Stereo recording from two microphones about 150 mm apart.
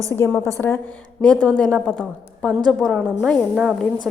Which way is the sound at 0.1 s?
20° left (ahead or behind).